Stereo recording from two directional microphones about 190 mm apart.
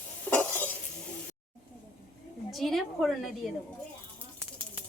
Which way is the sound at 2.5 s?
Centre (ahead or behind).